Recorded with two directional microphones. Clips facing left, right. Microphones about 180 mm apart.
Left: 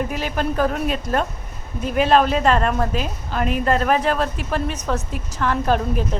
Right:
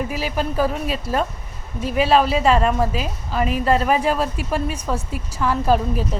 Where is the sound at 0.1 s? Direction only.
5° right (ahead or behind).